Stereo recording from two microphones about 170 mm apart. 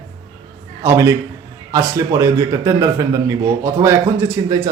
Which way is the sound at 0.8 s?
15° right (ahead or behind).